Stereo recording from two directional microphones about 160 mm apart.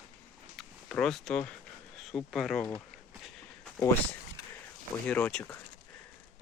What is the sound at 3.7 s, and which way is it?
Speech, 15° left (ahead or behind).